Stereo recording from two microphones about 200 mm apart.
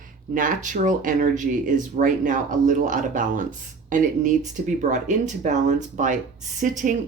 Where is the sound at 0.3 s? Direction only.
40° right (ahead or behind).